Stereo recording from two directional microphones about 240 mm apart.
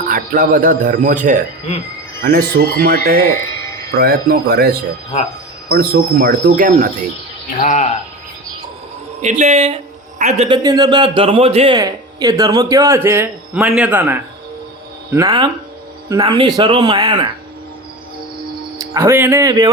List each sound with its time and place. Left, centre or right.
0.1 s speech: right
7.5 s speech: left
9.2 s speech: right
18.8 s speech: centre